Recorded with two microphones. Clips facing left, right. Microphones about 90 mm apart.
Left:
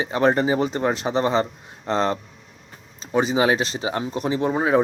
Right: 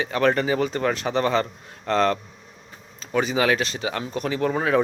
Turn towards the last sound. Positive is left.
turn(degrees=20)  # may be behind; listen again after turning